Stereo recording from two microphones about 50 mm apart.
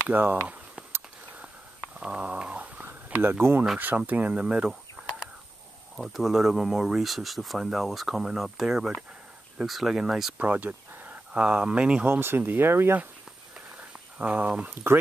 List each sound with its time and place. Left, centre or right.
0.1 s speech: right
2.0 s dog: right
2.8 s a sound: right
3.8 s speech: right
5.9 s speech: centre
10.3 s a sound: right
11.3 s speech: right
12.1 s speech: right
14.1 s speech: right